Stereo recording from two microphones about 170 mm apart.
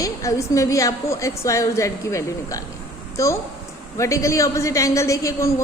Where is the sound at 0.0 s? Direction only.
20° left (ahead or behind).